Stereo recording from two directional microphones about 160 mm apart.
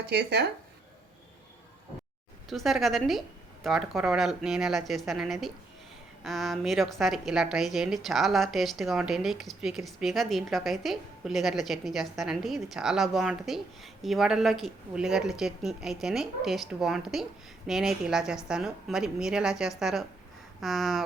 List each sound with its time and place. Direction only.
0.1 s speech: 90° right
2.5 s a woman's voice: centre (ahead or behind)